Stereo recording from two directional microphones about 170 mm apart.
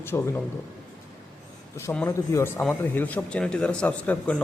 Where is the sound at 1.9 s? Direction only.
15° left (ahead or behind).